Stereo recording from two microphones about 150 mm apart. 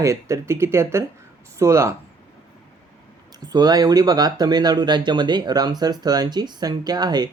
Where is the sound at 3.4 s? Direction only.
25° right (ahead or behind).